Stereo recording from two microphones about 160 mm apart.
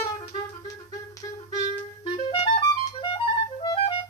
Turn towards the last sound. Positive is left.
turn(degrees=30)  # may be behind; listen again after turning